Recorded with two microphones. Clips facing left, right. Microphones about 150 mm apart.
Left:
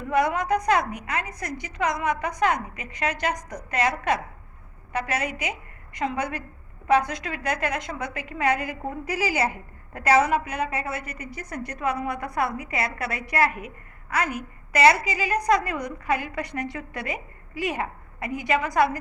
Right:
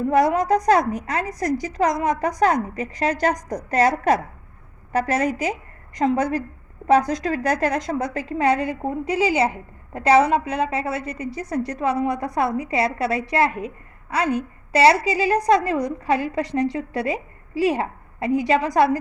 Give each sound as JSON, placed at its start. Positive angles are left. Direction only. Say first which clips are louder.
{"t": 0.1, "sound": "a woman's voice", "louder": "right 4 dB", "side_deg": -35}